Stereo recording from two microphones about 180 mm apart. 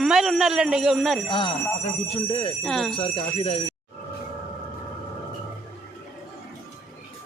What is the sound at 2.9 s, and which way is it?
Speech, 30° left (ahead or behind).